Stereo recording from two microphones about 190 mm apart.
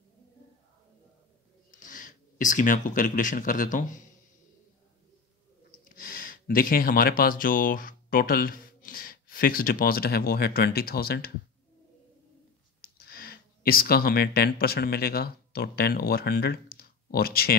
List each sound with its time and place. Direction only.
1.7 s speech: 45° left (ahead or behind)
5.9 s speech: 50° left (ahead or behind)
12.8 s speech: 55° left (ahead or behind)